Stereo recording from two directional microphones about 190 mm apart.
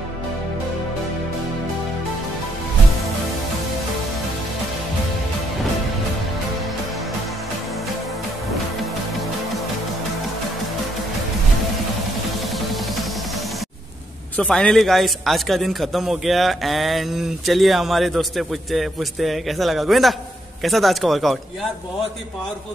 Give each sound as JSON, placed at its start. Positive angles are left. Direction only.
{"t": 14.3, "sound": "a man's voice", "side_deg": 5}